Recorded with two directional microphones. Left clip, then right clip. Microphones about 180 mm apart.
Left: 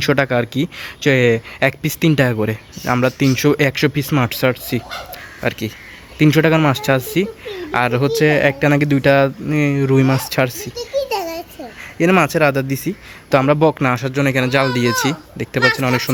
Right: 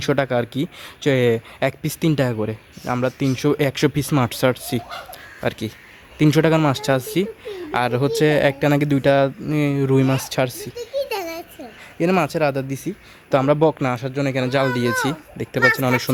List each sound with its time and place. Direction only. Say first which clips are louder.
0.0 s speech: left 4 dB; 10° right (ahead or behind)
11.1 s a sound: left 5 dB; 30° right (ahead or behind)
11.9 s speech: left 5 dB; 5° right (ahead or behind)